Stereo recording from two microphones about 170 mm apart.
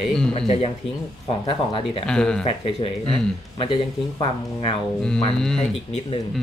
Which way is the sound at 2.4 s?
35° left (ahead or behind).